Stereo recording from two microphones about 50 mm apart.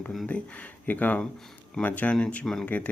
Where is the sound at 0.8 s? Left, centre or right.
Left.